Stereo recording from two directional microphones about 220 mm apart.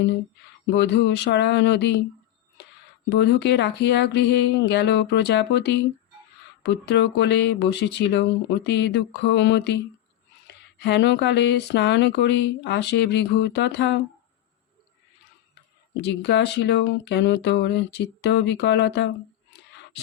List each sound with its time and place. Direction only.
0.7 s speech: 50° left (ahead or behind)
3.1 s speech: 50° left (ahead or behind)
6.8 s speech: 50° left (ahead or behind)
16.0 s speech: 50° left (ahead or behind)